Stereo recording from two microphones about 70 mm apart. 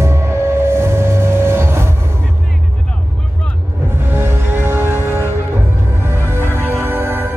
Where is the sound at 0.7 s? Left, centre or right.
Right.